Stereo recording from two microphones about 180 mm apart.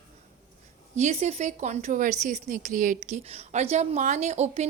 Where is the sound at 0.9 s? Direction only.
40° right (ahead or behind).